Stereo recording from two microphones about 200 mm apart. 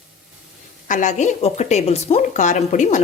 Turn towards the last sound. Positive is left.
turn(degrees=40)  # may be behind; listen again after turning